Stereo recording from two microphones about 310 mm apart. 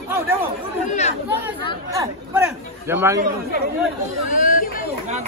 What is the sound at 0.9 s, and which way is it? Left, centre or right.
Chatter, left.